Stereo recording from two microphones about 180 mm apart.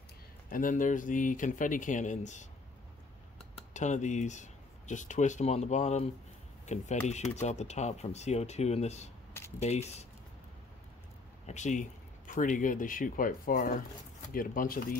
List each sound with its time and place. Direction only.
0.5 s speech: 50° left (ahead or behind)
3.7 s speech: 40° left (ahead or behind)
11.4 s speech: 40° left (ahead or behind)